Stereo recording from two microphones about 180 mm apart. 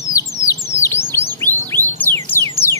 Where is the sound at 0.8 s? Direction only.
15° left (ahead or behind).